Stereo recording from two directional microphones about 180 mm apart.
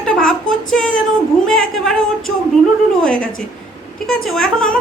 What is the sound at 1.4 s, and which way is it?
Speech, 5° left (ahead or behind).